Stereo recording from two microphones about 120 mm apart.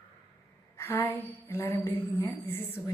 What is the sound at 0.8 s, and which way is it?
A woman's voice, 20° left (ahead or behind).